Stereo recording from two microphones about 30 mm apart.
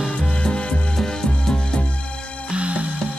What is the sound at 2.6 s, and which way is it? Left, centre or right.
Music, right.